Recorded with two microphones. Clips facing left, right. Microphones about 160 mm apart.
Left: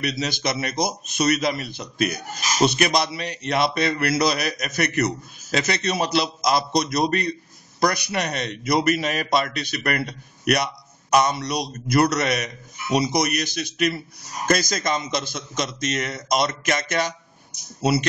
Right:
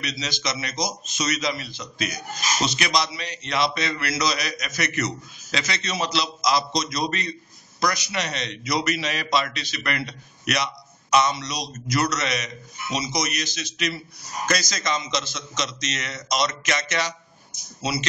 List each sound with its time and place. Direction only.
0.0 s a man's voice: 55° left (ahead or behind)